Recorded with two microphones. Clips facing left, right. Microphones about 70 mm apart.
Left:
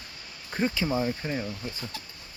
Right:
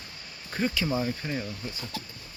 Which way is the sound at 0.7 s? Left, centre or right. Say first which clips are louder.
Left 1 dB; centre.